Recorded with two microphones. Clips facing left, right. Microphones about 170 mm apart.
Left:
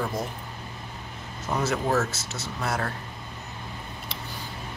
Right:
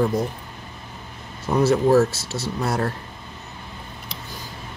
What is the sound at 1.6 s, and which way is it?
Speech, 35° right (ahead or behind).